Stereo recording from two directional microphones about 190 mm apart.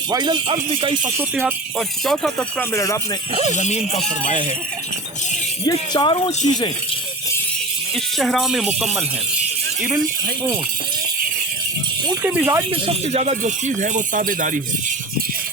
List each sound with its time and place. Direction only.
0.1 s speech: 20° right (ahead or behind)
2.0 s speech: centre (ahead or behind)
2.7 s speech: 15° left (ahead or behind)
3.5 s speech: 40° left (ahead or behind)
5.6 s speech: 25° left (ahead or behind)
8.2 s speech: centre (ahead or behind)
12.2 s speech: 10° right (ahead or behind)
12.7 s speech: 30° right (ahead or behind); by 14.6 s 45° right (ahead or behind)